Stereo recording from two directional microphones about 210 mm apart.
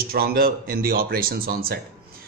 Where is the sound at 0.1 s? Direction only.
45° right (ahead or behind).